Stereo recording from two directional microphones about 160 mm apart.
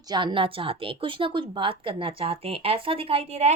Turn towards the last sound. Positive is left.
turn(degrees=-45)  # may be behind; listen again after turning